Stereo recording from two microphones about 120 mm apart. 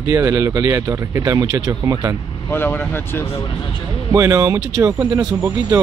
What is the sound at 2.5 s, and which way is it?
Speech, 20° left (ahead or behind).